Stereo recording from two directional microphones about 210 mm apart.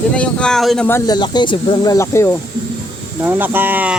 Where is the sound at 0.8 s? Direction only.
15° left (ahead or behind).